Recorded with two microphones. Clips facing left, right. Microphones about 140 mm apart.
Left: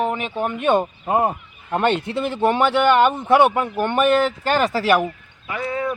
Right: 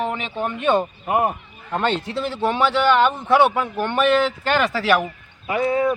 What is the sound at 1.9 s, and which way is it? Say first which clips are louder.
Speech: left 2 dB; 55° left (ahead or behind).